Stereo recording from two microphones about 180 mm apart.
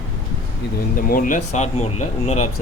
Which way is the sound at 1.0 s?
50° left (ahead or behind).